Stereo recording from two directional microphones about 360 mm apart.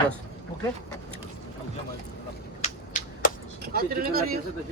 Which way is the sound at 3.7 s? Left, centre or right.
Right.